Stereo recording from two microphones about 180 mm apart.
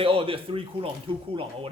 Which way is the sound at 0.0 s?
30° right (ahead or behind).